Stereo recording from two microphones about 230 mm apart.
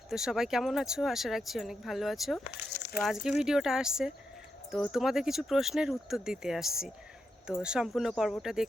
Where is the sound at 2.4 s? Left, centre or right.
Left.